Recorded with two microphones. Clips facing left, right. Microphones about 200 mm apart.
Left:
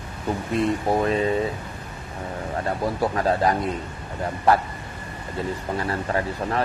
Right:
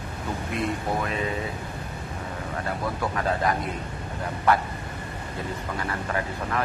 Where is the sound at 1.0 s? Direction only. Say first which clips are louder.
Left 7 dB; 30° left (ahead or behind).